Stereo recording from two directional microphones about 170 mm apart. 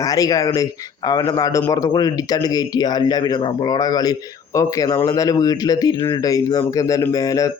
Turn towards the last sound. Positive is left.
turn(degrees=20)  # may be behind; listen again after turning